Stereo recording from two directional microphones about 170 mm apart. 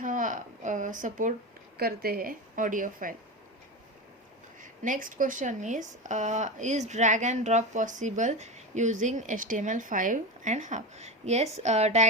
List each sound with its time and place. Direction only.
0.0 s a sound: 50° right (ahead or behind)
1.8 s speech: 60° right (ahead or behind)
4.6 s speech: 50° right (ahead or behind)